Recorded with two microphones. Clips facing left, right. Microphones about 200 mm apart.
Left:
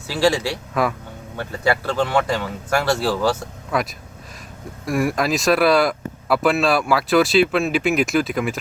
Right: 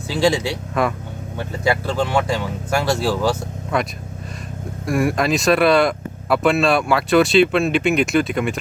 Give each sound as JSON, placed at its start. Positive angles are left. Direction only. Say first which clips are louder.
{"t": 0.1, "sound": "speech", "louder": "right 1 dB", "side_deg": -20}
{"t": 0.7, "sound": "speech", "louder": "right 1 dB", "side_deg": 0}
{"t": 1.4, "sound": "speech", "louder": "even", "side_deg": -15}
{"t": 3.7, "sound": "speech", "louder": "right 1 dB", "side_deg": 0}